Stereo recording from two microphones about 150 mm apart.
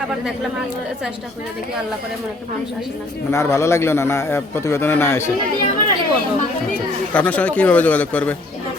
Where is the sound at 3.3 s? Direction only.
20° left (ahead or behind).